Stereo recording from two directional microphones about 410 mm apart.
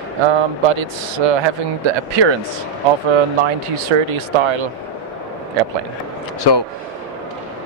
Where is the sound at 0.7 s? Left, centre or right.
Right.